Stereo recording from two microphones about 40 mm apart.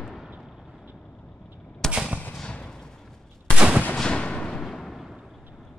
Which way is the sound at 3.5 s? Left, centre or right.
Right.